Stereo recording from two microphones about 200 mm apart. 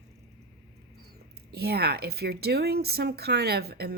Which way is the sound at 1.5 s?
50° right (ahead or behind).